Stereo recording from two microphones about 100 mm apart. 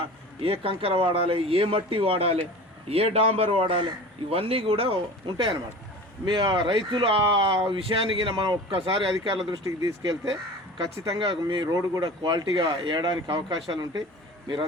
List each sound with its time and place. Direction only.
0.4 s speech: 65° right (ahead or behind)
9.6 s speech: 40° right (ahead or behind)
10.8 s speech: 60° right (ahead or behind)